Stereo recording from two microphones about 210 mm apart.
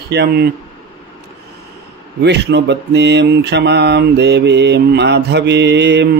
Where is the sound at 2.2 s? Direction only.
55° right (ahead or behind).